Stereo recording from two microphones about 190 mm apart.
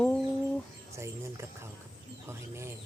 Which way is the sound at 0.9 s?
15° right (ahead or behind).